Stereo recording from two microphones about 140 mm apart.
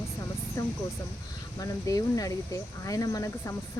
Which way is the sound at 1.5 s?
25° left (ahead or behind).